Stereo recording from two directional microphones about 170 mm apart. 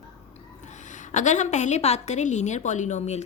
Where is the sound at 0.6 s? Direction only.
45° left (ahead or behind).